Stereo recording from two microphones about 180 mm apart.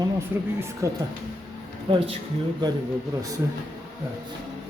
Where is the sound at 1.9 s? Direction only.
30° right (ahead or behind).